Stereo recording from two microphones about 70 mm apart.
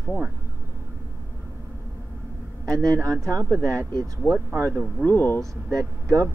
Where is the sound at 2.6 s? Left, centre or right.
Right.